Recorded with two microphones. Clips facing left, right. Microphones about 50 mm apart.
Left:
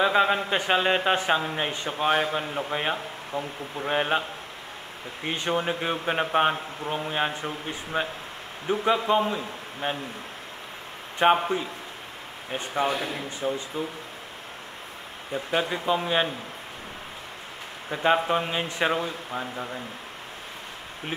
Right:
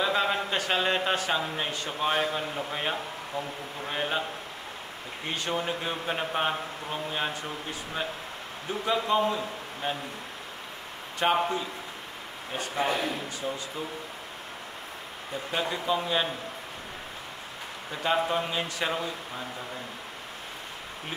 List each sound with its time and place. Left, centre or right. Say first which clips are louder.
0.0 s a man's voice: left 5 dB; centre
3.8 s a man's voice: left 6 dB; left
5.3 s a man's voice: left 4 dB; left
11.1 s a man's voice: left 4 dB; left
15.5 s a man's voice: left 3 dB; left
17.9 s a man's voice: left 4 dB; left